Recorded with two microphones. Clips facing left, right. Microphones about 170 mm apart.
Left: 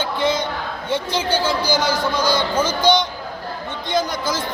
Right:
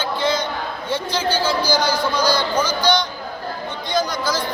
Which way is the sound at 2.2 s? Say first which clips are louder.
Left 1 dB; 25° left (ahead or behind).